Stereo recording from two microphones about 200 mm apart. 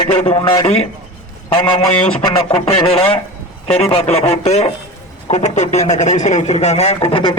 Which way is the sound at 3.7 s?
30° left (ahead or behind).